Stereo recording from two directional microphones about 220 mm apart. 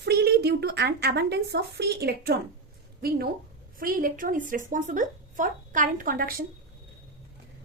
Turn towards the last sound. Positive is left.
turn(degrees=-40)  # may be behind; listen again after turning